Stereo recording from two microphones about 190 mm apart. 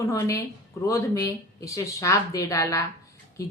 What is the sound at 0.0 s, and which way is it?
Speech, 15° left (ahead or behind).